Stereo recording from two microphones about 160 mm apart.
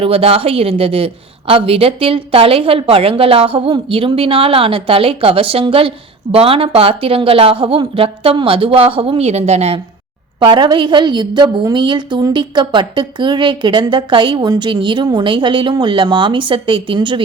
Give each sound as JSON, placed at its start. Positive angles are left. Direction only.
{"t": 0.0, "sound": "a woman's voice", "side_deg": -35}
{"t": 10.4, "sound": "a woman's voice", "side_deg": -30}